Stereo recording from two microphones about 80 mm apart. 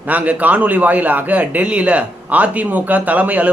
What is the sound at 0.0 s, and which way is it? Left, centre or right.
A man's voice, centre.